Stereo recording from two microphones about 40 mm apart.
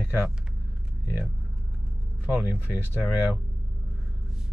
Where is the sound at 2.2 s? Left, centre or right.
Right.